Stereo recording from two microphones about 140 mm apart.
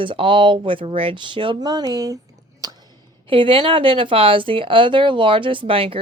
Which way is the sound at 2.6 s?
25° right (ahead or behind).